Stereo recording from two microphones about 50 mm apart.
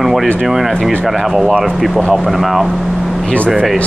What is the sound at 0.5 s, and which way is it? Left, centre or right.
Speech, centre.